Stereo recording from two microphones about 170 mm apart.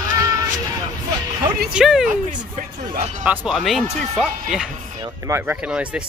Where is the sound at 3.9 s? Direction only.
45° right (ahead or behind).